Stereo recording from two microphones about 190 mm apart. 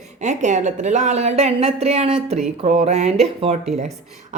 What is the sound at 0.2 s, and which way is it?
Speech, 40° right (ahead or behind).